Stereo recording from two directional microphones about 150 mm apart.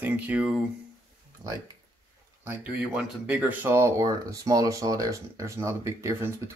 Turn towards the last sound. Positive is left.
turn(degrees=-20)  # may be behind; listen again after turning